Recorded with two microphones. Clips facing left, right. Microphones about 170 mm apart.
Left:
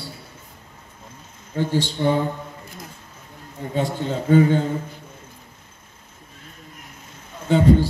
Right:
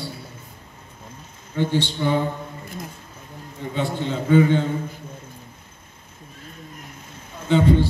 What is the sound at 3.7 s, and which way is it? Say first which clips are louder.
Speech: left 1 dB; 40° left (ahead or behind).